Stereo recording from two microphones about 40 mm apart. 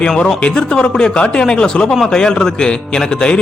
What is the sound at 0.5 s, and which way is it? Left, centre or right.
Speech, left.